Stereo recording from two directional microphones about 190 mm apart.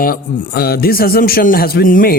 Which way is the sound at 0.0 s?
50° left (ahead or behind).